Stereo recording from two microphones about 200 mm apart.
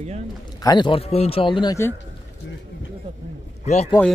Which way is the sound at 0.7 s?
20° left (ahead or behind).